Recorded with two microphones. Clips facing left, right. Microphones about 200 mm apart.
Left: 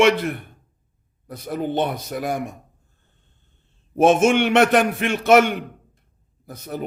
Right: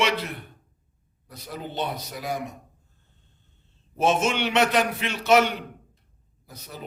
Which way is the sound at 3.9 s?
50° left (ahead or behind).